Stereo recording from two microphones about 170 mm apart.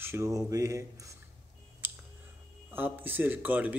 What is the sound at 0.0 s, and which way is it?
Speech, 15° right (ahead or behind).